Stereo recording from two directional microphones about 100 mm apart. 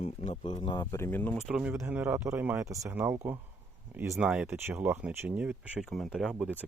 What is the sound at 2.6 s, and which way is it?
Speech, 35° right (ahead or behind).